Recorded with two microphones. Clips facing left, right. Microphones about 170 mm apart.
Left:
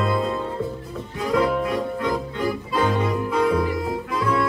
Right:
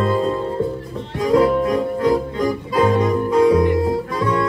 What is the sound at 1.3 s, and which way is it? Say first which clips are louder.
Music: right 6 dB; 40° right (ahead or behind).